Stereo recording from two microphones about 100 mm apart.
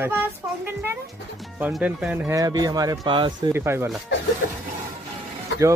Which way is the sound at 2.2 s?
35° right (ahead or behind).